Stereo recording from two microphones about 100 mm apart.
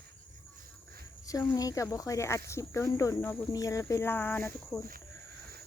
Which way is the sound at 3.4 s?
35° left (ahead or behind).